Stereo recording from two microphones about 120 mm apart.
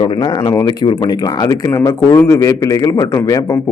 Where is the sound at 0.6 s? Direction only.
35° left (ahead or behind).